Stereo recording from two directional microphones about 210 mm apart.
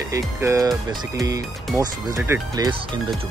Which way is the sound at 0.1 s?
15° right (ahead or behind).